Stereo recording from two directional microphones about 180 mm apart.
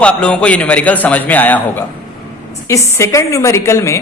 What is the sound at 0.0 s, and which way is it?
Speech, 5° left (ahead or behind).